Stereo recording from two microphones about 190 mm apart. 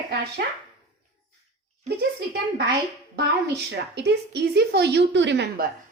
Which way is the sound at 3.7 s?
65° right (ahead or behind).